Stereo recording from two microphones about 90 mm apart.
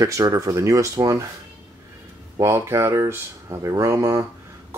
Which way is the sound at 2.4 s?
30° right (ahead or behind).